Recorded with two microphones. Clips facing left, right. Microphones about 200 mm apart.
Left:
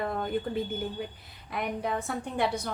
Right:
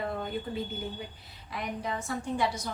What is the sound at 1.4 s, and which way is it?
A woman's voice, 55° left (ahead or behind).